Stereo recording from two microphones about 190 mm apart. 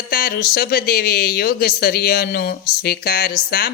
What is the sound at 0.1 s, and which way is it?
Speech, 50° left (ahead or behind).